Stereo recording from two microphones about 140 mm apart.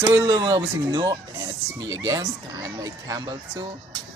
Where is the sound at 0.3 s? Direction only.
35° right (ahead or behind).